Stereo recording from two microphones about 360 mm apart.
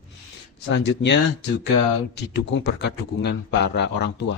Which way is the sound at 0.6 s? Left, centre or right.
Left.